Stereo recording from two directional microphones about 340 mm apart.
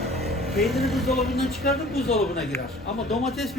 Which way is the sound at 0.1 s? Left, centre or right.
Centre.